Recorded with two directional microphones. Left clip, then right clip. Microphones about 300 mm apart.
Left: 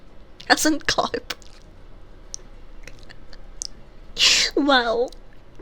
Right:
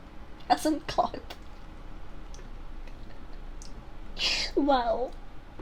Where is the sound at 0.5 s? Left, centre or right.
Left.